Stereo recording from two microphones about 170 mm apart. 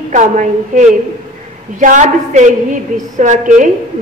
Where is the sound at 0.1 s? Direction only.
45° right (ahead or behind).